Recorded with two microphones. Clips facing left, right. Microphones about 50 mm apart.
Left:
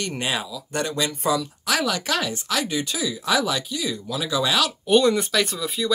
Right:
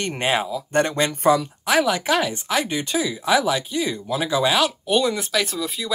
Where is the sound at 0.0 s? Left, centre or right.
Right.